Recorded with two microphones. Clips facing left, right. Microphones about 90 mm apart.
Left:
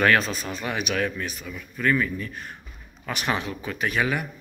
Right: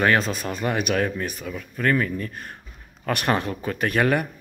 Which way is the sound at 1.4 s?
50° right (ahead or behind).